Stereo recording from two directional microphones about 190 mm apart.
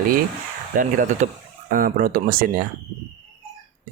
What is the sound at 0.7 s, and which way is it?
Speech, 45° right (ahead or behind).